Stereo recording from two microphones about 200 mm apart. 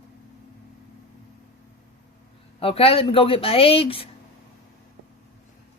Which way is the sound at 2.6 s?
30° left (ahead or behind).